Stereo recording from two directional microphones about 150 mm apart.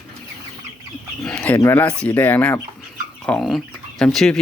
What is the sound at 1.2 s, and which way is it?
Speech, 5° left (ahead or behind).